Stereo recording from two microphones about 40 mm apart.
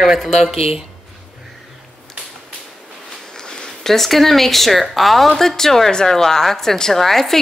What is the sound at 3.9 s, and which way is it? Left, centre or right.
A woman's voice, centre.